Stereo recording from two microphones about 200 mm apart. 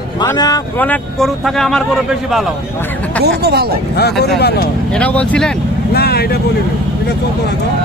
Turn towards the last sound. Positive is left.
turn(degrees=50)  # may be behind; listen again after turning